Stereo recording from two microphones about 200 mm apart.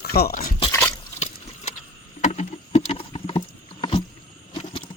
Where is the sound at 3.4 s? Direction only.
25° left (ahead or behind).